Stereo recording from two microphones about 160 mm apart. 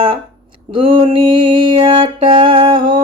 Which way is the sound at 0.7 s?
30° right (ahead or behind).